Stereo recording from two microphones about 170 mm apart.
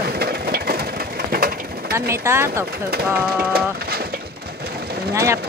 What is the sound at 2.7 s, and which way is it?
Speech, 65° right (ahead or behind).